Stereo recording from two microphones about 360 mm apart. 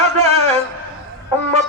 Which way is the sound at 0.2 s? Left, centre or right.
Centre.